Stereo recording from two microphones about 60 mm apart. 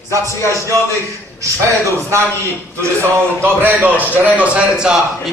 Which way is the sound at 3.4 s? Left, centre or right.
Right.